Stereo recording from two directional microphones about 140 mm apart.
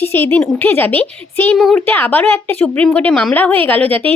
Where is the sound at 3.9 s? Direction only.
40° right (ahead or behind).